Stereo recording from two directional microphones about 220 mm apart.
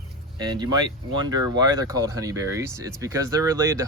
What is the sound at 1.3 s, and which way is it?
Speech, 15° right (ahead or behind).